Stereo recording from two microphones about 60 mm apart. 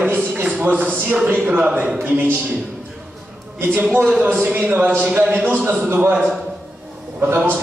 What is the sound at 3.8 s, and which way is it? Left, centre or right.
A man's voice, right.